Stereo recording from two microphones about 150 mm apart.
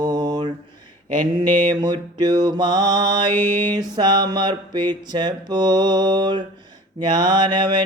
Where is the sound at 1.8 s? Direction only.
25° right (ahead or behind).